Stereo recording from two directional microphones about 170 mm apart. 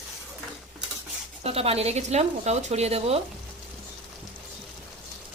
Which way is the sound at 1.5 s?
35° right (ahead or behind).